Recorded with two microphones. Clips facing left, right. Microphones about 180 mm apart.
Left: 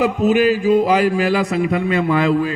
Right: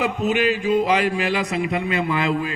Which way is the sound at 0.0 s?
45° left (ahead or behind).